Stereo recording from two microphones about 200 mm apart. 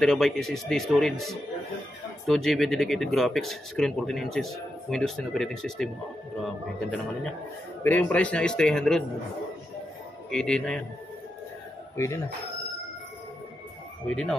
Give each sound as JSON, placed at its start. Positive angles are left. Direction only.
{"t": 0.0, "sound": "speech", "side_deg": 0}
{"t": 7.8, "sound": "speech", "side_deg": 10}
{"t": 10.3, "sound": "speech", "side_deg": 5}
{"t": 12.0, "sound": "speech", "side_deg": 15}
{"t": 14.0, "sound": "speech", "side_deg": 5}